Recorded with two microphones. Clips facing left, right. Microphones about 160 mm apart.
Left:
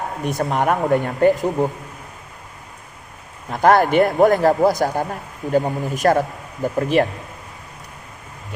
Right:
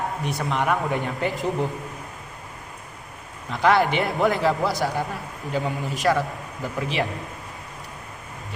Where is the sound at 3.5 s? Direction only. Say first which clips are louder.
Left 5 dB; 45° left (ahead or behind).